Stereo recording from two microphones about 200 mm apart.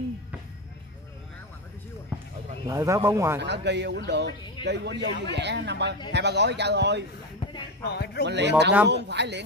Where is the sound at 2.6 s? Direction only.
15° right (ahead or behind).